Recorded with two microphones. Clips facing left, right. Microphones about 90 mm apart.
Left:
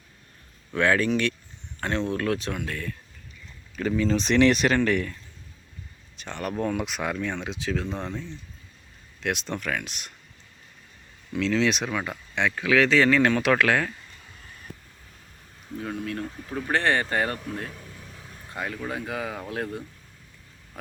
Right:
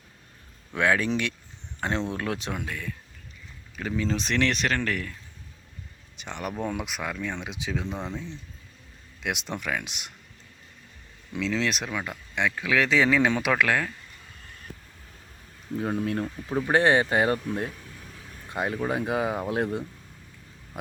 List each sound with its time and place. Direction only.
0.7 s speech: 10° right (ahead or behind)
3.8 s speech: 5° right (ahead or behind)
6.1 s speech: 15° right (ahead or behind)
9.2 s speech: 15° right (ahead or behind)
11.3 s speech: 5° right (ahead or behind)
15.8 s speech: 30° right (ahead or behind)
16.6 s speech: 15° right (ahead or behind)